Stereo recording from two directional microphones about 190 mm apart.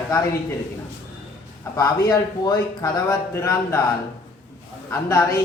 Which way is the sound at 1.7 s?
20° left (ahead or behind).